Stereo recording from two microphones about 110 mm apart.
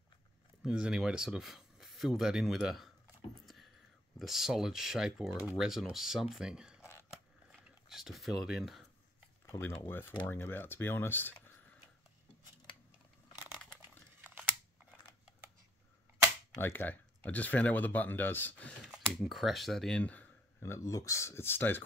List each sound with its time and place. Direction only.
0.7 s speech: 5° right (ahead or behind)
4.2 s speech: centre (ahead or behind)
7.9 s speech: centre (ahead or behind)
9.8 s speech: 20° left (ahead or behind)
13.7 s a sound: 20° right (ahead or behind)
16.5 s speech: 20° left (ahead or behind)
19.1 s speech: centre (ahead or behind)
20.6 s speech: 25° left (ahead or behind)